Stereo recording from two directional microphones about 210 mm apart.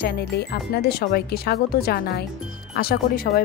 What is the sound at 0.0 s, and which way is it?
Speech, 50° left (ahead or behind).